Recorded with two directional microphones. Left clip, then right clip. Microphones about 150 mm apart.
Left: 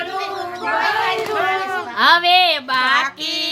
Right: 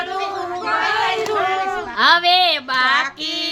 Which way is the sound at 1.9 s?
5° right (ahead or behind).